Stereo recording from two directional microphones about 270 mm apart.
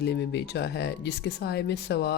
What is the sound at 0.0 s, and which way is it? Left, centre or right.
Speech, left.